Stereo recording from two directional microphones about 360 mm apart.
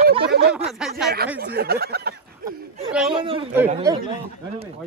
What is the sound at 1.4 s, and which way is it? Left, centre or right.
Speech, right.